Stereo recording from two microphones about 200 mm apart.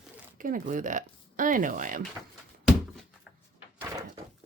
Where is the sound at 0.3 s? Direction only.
40° right (ahead or behind).